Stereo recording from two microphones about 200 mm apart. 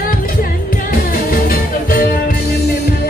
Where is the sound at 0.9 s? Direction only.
45° left (ahead or behind).